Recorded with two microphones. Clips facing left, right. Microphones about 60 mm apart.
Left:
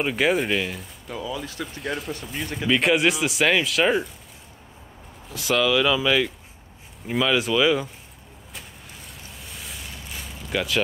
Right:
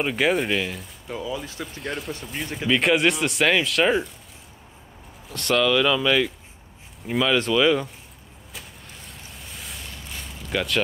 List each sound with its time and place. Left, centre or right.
0.0 s speech: centre
1.0 s speech: centre
1.6 s speech: centre
5.3 s speech: centre
9.4 s a sound: centre